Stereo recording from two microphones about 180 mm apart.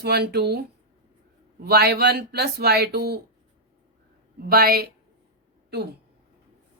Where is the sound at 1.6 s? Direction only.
65° right (ahead or behind).